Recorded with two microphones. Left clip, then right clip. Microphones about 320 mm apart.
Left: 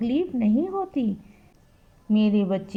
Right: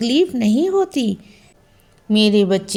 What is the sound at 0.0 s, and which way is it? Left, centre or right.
A woman's voice, centre.